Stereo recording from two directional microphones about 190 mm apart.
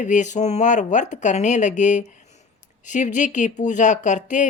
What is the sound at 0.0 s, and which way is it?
Speech, 40° left (ahead or behind).